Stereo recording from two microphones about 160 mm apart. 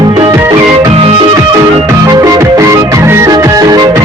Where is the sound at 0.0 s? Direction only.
30° right (ahead or behind).